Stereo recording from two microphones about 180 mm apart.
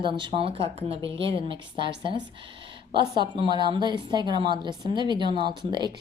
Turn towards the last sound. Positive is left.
turn(degrees=-25)  # may be behind; listen again after turning